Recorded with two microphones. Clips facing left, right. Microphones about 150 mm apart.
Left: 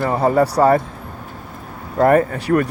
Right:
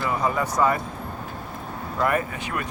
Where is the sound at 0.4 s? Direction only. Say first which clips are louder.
Left 7 dB; 35° left (ahead or behind).